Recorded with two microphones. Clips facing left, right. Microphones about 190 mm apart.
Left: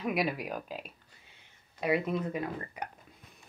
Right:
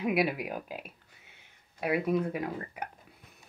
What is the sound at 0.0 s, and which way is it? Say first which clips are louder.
Speech: right 3 dB; 5° right (ahead or behind).